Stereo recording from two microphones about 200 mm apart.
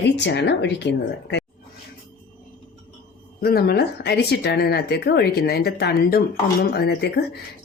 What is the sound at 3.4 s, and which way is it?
Speech, 50° left (ahead or behind).